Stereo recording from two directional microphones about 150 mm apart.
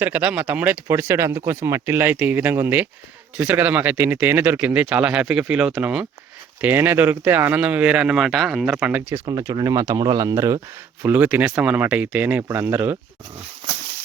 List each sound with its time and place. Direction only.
0.0 s speech: 10° right (ahead or behind)
9.5 s speech: 25° right (ahead or behind)